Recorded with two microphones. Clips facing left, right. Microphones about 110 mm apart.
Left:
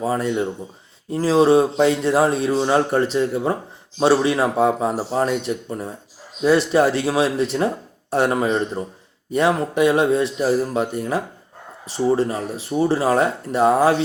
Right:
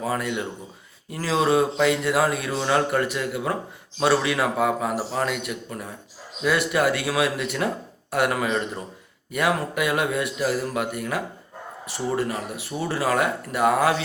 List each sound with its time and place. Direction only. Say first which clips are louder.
0.0 s speech: left 5 dB; 30° left (ahead or behind)